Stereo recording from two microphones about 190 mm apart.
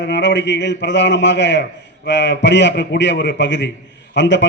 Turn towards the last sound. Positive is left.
turn(degrees=70)  # may be behind; listen again after turning